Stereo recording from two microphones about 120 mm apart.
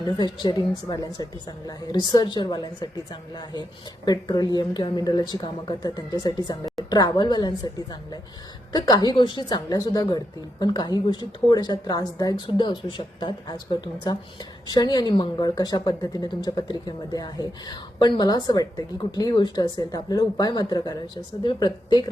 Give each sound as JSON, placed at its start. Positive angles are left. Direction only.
{"t": 0.2, "sound": "speech", "side_deg": 35}
{"t": 12.5, "sound": "speech", "side_deg": 45}